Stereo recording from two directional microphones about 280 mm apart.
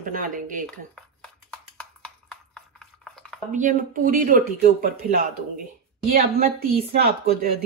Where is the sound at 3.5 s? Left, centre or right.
Right.